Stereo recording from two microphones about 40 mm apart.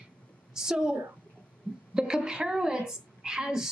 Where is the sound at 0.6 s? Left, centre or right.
Centre.